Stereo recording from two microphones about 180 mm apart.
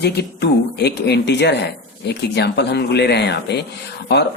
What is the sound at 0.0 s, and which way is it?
Speech, 65° left (ahead or behind).